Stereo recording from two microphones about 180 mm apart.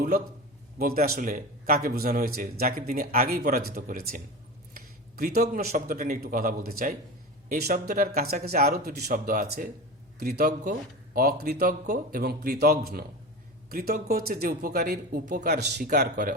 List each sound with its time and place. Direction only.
0.8 s a man's voice: 55° right (ahead or behind)
4.7 s a sound: 55° right (ahead or behind)
5.6 s a man's voice: 55° right (ahead or behind)
10.6 s a man's voice: 50° right (ahead or behind)